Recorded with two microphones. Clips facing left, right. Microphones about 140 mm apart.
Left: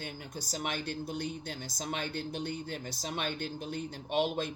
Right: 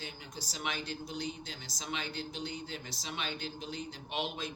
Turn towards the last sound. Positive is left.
turn(degrees=45)  # may be behind; listen again after turning